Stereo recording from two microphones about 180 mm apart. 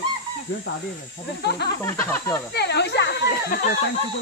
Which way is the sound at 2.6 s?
70° left (ahead or behind).